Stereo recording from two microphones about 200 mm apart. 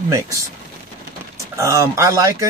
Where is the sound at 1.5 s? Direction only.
15° right (ahead or behind).